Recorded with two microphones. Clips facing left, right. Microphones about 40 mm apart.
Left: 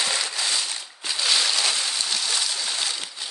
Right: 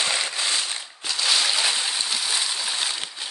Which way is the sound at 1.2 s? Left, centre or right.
Centre.